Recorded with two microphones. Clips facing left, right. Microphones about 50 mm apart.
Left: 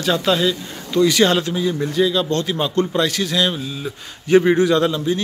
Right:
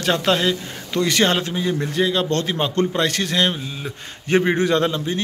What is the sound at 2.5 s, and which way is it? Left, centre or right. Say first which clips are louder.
A man's voice: left 2 dB; right.